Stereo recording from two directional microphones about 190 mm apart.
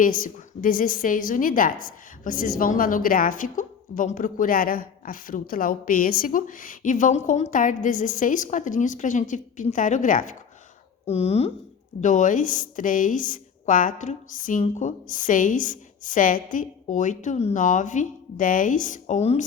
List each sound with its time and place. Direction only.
0.0 s a woman's voice: 45° left (ahead or behind)
11.0 s a woman's voice: 35° left (ahead or behind)